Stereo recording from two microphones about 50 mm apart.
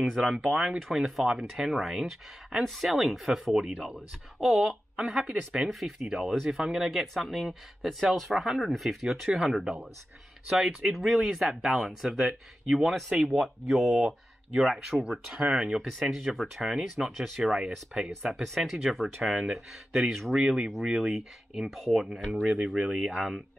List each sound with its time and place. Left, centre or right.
0.2 s speech: centre
3.5 s speech: centre
10.9 s speech: centre
16.7 s speech: centre
19.2 s speech: centre
21.6 s speech: centre